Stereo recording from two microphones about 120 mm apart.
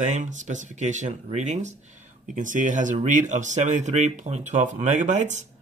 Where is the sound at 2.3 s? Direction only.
90° right.